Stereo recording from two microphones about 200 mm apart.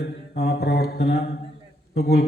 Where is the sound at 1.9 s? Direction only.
50° left (ahead or behind).